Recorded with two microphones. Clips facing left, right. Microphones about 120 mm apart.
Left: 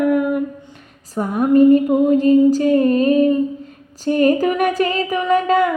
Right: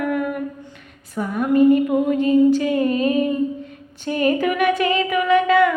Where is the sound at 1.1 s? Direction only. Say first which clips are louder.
Left 4 dB; 40° left (ahead or behind).